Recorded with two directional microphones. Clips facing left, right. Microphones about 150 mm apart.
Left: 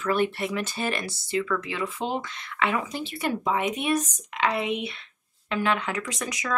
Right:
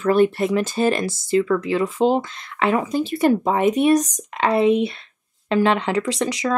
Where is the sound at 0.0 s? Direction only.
40° right (ahead or behind).